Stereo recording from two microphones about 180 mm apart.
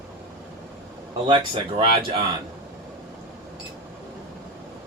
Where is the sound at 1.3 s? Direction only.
30° right (ahead or behind).